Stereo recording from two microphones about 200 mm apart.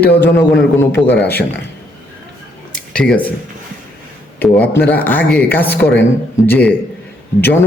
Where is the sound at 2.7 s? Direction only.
5° left (ahead or behind).